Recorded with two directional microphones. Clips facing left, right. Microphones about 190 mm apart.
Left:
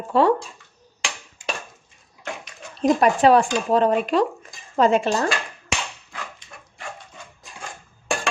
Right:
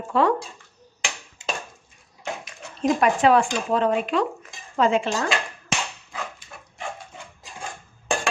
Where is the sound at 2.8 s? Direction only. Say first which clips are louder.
Left 3 dB; 35° left (ahead or behind).